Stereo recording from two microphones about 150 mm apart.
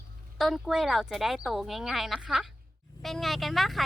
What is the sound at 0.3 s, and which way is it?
Speech, centre (ahead or behind).